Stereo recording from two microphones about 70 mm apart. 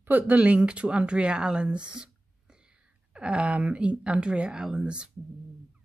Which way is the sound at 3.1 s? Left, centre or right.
Centre.